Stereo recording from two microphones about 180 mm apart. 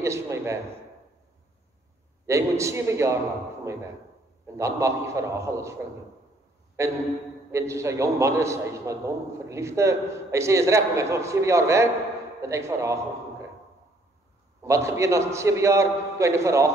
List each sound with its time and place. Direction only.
0.0 s a sound: 15° right (ahead or behind)
2.2 s a man's voice: 15° right (ahead or behind)
4.6 s a man's voice: 15° right (ahead or behind)
6.8 s a man's voice: 15° right (ahead or behind)
14.6 s a man's voice: 15° right (ahead or behind)